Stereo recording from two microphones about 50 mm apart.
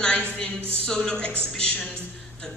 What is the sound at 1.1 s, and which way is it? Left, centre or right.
Speech, left.